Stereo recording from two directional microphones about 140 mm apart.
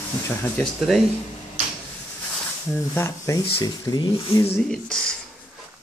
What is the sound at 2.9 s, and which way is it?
Speech, 20° left (ahead or behind).